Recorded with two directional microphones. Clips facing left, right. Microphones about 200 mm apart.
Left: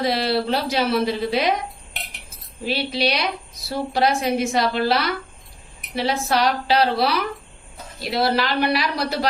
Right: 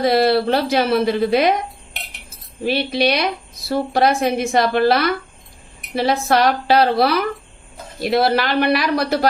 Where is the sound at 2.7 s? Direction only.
50° right (ahead or behind).